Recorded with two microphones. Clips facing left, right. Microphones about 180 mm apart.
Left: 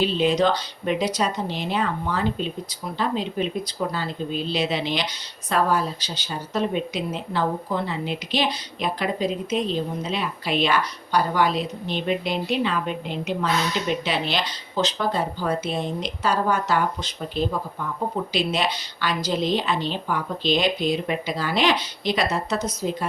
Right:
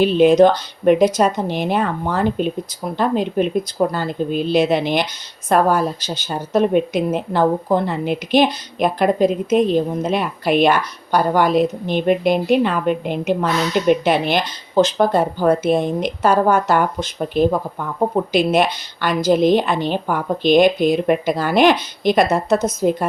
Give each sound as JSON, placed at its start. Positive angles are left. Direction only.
{"t": 0.0, "sound": "a woman's voice", "side_deg": -50}